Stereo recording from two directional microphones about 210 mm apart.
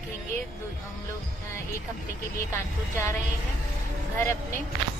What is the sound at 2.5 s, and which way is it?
Music, 15° left (ahead or behind).